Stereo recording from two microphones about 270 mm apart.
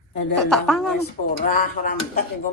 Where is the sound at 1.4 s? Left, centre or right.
Left.